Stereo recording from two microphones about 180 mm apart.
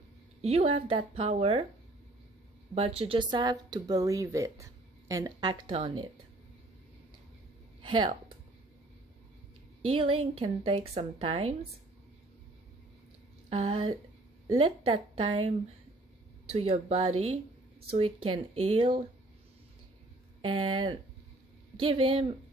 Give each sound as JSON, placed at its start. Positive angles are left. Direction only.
{"t": 0.4, "sound": "a woman's voice", "side_deg": -35}
{"t": 2.7, "sound": "speech", "side_deg": -35}
{"t": 7.9, "sound": "speech", "side_deg": -25}
{"t": 9.8, "sound": "a woman's voice", "side_deg": -30}
{"t": 13.5, "sound": "a woman's voice", "side_deg": -30}
{"t": 20.4, "sound": "speech", "side_deg": -30}